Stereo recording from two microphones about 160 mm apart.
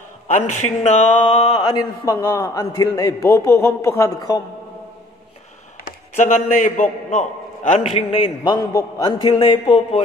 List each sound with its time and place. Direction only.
0.3 s speech: 45° left (ahead or behind)
1.5 s a man's voice: 30° left (ahead or behind)
2.1 s a man's voice: 20° left (ahead or behind)
6.1 s a man's voice: 60° left (ahead or behind); by 10.0 s 35° left (ahead or behind)